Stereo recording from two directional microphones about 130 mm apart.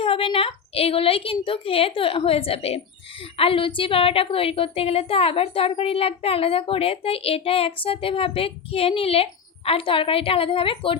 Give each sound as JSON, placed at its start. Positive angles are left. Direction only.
{"t": 0.0, "sound": "a woman's voice", "side_deg": 45}